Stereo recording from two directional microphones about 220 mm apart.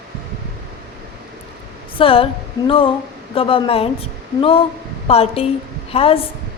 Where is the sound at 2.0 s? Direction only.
25° left (ahead or behind).